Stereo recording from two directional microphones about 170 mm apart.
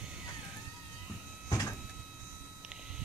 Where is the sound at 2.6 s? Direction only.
5° right (ahead or behind).